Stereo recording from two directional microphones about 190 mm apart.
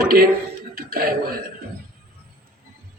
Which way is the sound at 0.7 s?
50° right (ahead or behind).